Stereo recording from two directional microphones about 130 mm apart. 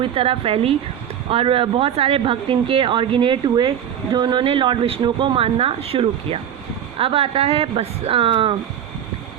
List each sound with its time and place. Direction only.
0.0 s speech: 45° right (ahead or behind)